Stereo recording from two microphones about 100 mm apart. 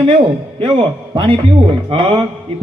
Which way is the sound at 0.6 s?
60° right (ahead or behind).